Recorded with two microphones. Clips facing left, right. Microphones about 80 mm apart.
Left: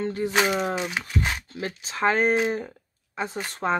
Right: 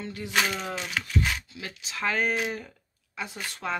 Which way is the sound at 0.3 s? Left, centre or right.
Left.